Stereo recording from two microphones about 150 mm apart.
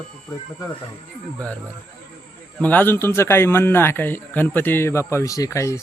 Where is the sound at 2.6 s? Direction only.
10° left (ahead or behind).